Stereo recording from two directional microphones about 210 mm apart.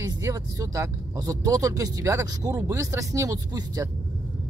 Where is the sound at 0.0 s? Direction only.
15° right (ahead or behind).